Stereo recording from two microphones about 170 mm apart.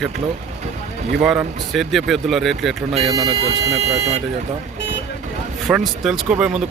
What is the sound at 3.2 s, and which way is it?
Speech, 35° right (ahead or behind).